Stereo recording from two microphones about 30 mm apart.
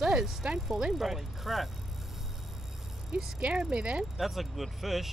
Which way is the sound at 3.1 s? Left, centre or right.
Right.